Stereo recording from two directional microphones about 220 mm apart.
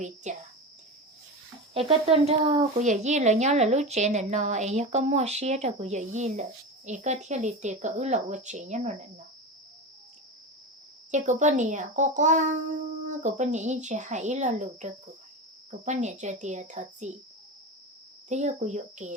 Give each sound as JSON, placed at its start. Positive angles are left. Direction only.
{"t": 0.3, "sound": "speech", "side_deg": -30}
{"t": 1.7, "sound": "speech", "side_deg": -25}
{"t": 11.1, "sound": "speech", "side_deg": -35}
{"t": 18.3, "sound": "speech", "side_deg": -35}